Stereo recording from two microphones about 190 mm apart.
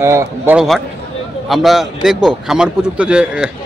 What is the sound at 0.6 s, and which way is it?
A man's voice, centre (ahead or behind).